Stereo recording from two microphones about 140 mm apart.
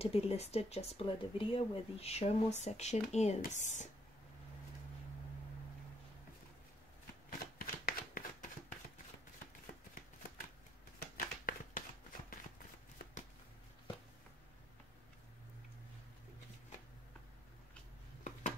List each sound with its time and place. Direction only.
0.0 s speech: 45° left (ahead or behind)
7.2 s shuffling cards: 90° left
11.0 s a sound: 85° left